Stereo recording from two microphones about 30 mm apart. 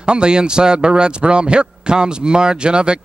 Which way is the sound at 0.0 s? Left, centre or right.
Right.